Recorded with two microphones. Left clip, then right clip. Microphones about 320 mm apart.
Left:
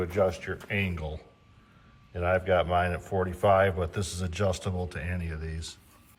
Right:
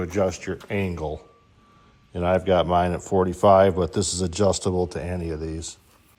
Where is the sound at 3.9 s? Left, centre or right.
Centre.